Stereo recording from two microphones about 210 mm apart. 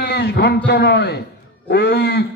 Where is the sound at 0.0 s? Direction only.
50° left (ahead or behind).